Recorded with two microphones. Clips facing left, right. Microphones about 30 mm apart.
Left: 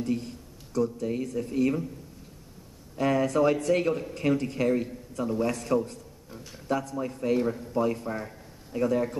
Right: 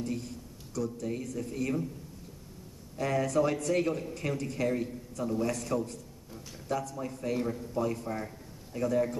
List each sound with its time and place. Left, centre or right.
0.0 s speech: left
3.0 s speech: left